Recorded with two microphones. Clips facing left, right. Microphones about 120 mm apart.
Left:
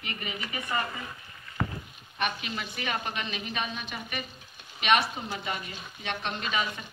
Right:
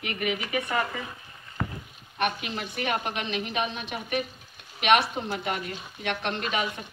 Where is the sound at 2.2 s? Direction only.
55° right (ahead or behind).